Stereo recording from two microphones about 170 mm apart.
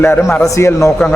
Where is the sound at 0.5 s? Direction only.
15° left (ahead or behind).